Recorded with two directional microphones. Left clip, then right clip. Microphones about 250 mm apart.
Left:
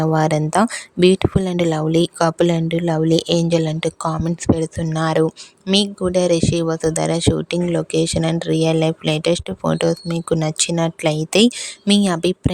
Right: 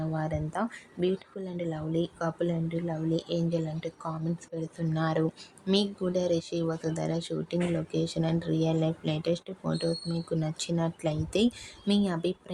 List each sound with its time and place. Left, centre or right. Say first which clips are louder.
0.0 s speech: left 16 dB; left